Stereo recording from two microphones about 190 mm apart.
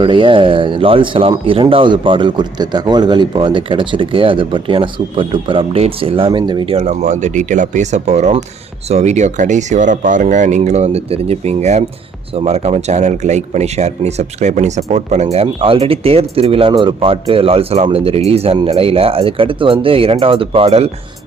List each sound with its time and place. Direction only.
0.0 s speech: 25° right (ahead or behind)